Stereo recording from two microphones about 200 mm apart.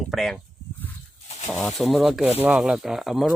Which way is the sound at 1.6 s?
Centre (ahead or behind).